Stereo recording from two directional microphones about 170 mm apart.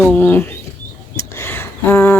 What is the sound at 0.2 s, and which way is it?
Speech, 10° left (ahead or behind).